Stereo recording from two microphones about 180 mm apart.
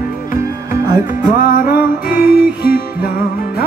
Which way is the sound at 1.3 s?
50° left (ahead or behind).